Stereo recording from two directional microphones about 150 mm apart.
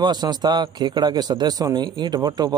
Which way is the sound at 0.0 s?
30° right (ahead or behind).